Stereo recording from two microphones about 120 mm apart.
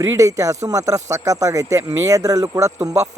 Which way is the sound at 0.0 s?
25° right (ahead or behind).